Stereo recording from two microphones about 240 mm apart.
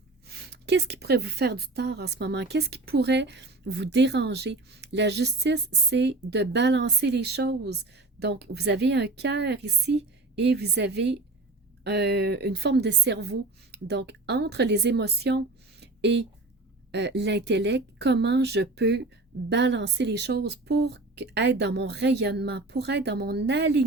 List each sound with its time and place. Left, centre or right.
0.3 s a woman's voice: right